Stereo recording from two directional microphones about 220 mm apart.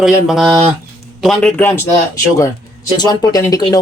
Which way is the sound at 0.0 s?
Centre (ahead or behind).